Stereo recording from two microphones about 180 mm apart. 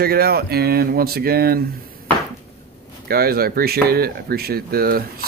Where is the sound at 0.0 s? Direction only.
55° right (ahead or behind).